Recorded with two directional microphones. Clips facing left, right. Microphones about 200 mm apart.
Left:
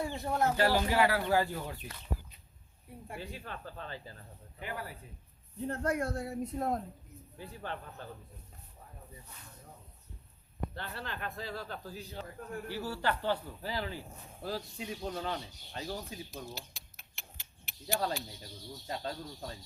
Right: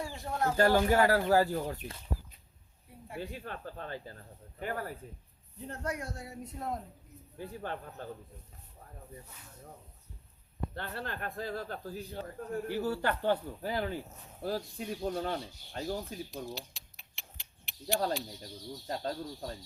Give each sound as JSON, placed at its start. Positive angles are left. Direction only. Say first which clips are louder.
{"t": 0.0, "sound": "speech", "louder": "left 2 dB", "side_deg": 25}
{"t": 0.5, "sound": "speech", "louder": "right 7 dB", "side_deg": -50}
{"t": 3.2, "sound": "speech", "louder": "right 5 dB", "side_deg": -50}
{"t": 5.6, "sound": "speech", "louder": "left 5 dB", "side_deg": 50}
{"t": 7.3, "sound": "speech", "louder": "right 3 dB", "side_deg": -50}
{"t": 10.8, "sound": "speech", "louder": "right 5 dB", "side_deg": -50}
{"t": 16.5, "sound": "a sound", "louder": "right 4 dB", "side_deg": 0}
{"t": 18.9, "sound": "speech", "louder": "right 3 dB", "side_deg": -45}